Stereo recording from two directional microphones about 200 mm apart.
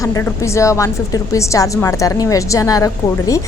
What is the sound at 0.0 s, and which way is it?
A woman's voice, 15° left (ahead or behind).